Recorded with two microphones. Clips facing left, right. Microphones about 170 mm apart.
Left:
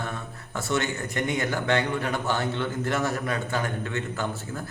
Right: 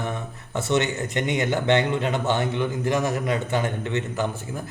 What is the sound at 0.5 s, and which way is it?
A man's voice, 20° right (ahead or behind).